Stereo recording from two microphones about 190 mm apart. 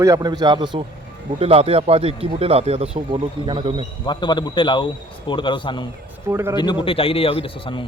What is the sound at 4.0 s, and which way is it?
A man's voice, 25° left (ahead or behind).